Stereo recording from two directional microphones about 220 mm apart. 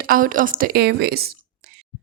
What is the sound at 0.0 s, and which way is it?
Speech, 40° right (ahead or behind).